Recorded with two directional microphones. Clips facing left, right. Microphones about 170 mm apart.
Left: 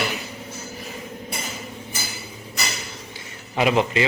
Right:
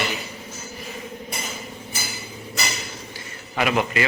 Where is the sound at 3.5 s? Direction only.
25° left (ahead or behind).